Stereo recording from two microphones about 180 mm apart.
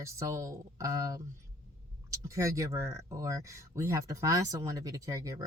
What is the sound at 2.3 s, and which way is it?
Speech, 15° right (ahead or behind).